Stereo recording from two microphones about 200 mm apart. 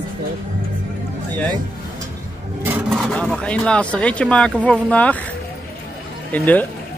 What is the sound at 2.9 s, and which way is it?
Speech, 5° left (ahead or behind).